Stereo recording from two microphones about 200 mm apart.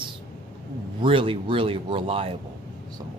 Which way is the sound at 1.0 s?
25° right (ahead or behind).